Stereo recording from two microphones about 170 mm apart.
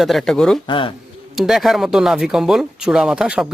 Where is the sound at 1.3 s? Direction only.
Centre (ahead or behind).